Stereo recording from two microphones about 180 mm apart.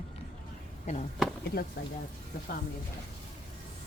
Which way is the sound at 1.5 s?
55° left (ahead or behind).